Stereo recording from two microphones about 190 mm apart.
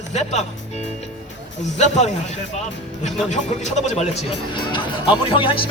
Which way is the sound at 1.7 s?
35° left (ahead or behind).